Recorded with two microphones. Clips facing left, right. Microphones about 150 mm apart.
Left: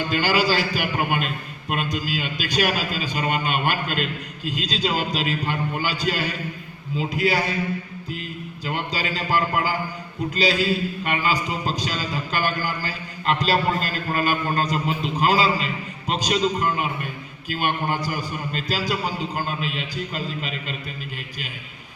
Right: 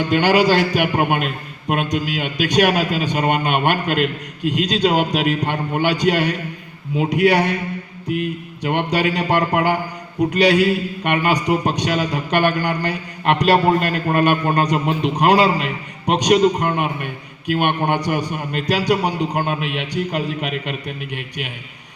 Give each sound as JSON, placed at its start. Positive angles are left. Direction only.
{"t": 0.0, "sound": "a man's voice", "side_deg": -65}